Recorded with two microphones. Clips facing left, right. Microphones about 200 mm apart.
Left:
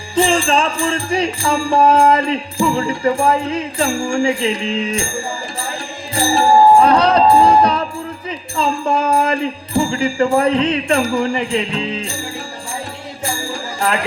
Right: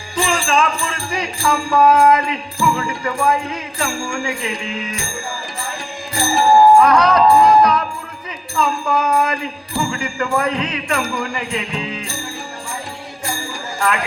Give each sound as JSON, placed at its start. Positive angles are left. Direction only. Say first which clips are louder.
{"t": 0.2, "sound": "music", "louder": "left 3 dB", "side_deg": 30}
{"t": 6.1, "sound": "music", "louder": "left 1 dB", "side_deg": 35}
{"t": 13.7, "sound": "speech", "louder": "left 1 dB", "side_deg": 35}